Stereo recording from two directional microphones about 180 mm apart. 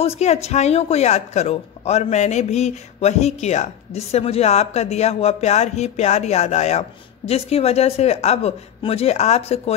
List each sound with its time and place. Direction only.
0.0 s speech: 35° left (ahead or behind)